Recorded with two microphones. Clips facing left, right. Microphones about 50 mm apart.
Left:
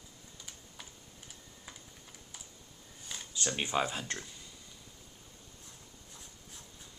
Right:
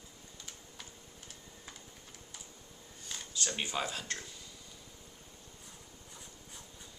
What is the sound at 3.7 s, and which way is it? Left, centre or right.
Speech, centre.